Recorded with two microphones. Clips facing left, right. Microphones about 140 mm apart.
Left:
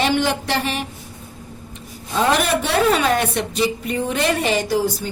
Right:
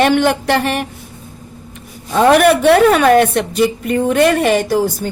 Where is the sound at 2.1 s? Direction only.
60° right (ahead or behind).